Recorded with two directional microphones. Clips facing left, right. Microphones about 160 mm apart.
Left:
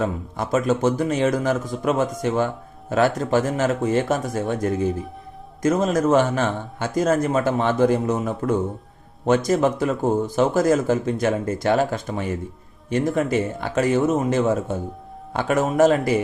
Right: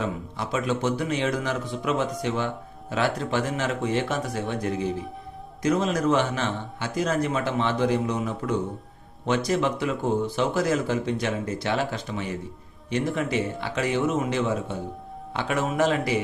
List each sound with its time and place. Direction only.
0.0 s speech: 45° left (ahead or behind)